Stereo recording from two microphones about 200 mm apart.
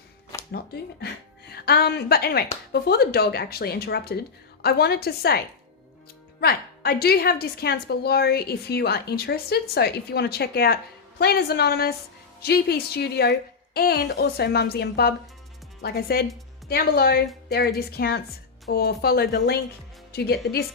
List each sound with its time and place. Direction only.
1.5 s a woman's voice: 50° left (ahead or behind)
6.4 s a woman's voice: 50° left (ahead or behind)